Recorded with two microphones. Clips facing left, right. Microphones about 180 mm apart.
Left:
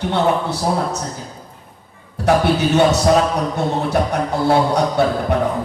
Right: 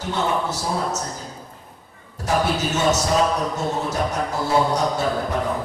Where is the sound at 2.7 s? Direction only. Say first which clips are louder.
Left 7 dB; 60° left (ahead or behind).